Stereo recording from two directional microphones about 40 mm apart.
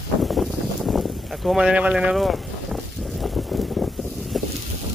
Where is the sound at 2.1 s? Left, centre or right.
Centre.